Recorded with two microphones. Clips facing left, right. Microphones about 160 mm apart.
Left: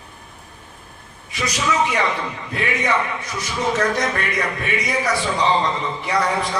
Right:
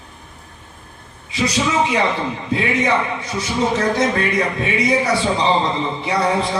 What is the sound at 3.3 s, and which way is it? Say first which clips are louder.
A man's voice: right 3 dB; 30° right (ahead or behind).